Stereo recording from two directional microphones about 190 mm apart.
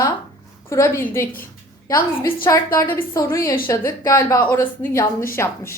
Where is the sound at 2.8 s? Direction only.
15° left (ahead or behind).